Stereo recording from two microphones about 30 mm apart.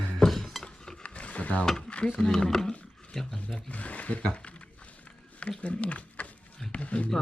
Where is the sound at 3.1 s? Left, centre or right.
Centre.